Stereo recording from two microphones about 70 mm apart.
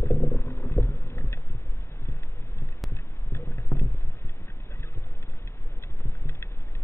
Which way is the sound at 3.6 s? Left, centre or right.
Left.